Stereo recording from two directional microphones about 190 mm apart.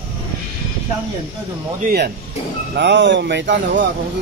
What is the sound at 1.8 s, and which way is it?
Speech, 55° right (ahead or behind).